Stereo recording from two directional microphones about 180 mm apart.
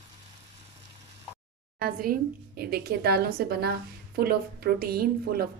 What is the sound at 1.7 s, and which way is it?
A woman's voice, 55° right (ahead or behind).